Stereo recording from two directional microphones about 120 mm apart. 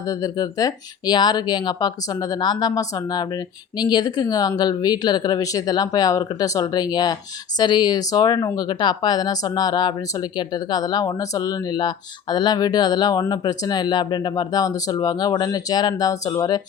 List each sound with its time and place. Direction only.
0.1 s speech: 30° left (ahead or behind)